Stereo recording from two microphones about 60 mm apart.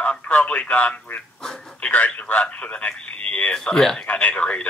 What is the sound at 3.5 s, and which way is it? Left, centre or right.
Speech, centre.